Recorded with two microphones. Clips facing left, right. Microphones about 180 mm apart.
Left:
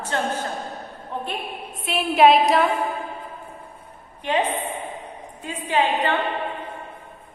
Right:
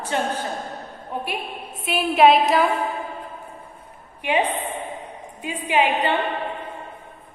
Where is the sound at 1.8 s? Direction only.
Centre (ahead or behind).